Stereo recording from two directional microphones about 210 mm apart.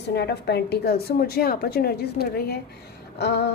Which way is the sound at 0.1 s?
50° left (ahead or behind).